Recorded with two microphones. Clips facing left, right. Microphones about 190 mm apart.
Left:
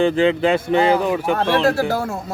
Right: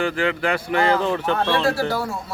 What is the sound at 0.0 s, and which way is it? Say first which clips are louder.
Speech: left 6 dB; 20° left (ahead or behind).